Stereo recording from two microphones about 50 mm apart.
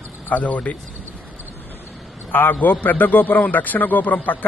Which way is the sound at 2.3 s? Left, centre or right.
Left.